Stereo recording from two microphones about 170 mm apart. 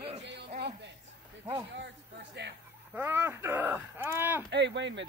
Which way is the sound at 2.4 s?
90° right.